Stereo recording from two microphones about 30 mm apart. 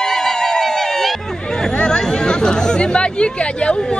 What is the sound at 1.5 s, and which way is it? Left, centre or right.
Chatter, centre.